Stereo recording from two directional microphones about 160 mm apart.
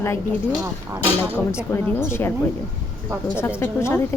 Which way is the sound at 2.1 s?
15° left (ahead or behind).